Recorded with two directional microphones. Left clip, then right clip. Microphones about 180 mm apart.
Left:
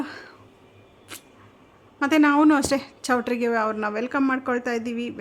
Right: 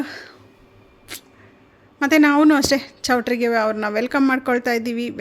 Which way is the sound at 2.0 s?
15° right (ahead or behind).